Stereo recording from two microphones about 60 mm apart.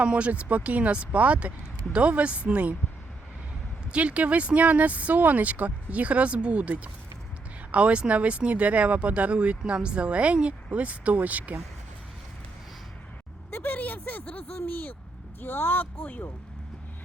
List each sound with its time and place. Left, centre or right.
0.0 s speech: right
3.9 s speech: right
13.5 s speech: left
15.4 s speech: left